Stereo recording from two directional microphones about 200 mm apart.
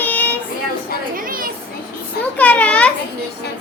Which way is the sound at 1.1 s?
45° right (ahead or behind).